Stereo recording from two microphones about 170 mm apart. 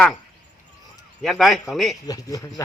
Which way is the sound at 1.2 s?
Centre (ahead or behind).